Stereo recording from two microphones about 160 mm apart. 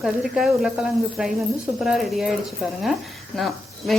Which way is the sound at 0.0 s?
5° right (ahead or behind).